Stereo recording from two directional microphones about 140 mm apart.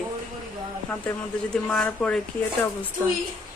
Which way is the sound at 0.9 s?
10° left (ahead or behind).